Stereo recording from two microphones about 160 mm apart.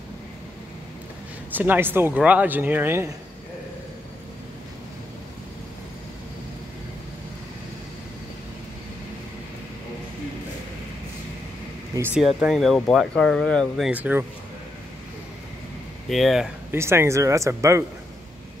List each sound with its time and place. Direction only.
1.5 s speech: 10° right (ahead or behind)
11.9 s speech: 15° right (ahead or behind)
12.2 s speech: 5° right (ahead or behind)
13.9 s speech: 10° right (ahead or behind)
16.1 s speech: centre (ahead or behind)
16.7 s speech: 15° right (ahead or behind)